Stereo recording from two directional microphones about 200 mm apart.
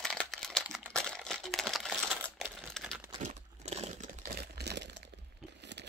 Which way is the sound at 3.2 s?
35° right (ahead or behind).